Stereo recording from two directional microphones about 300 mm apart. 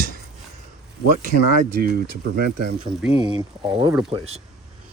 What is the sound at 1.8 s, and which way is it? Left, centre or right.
Speech, right.